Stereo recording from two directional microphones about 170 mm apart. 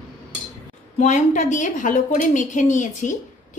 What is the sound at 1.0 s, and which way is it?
A woman's voice, 45° left (ahead or behind).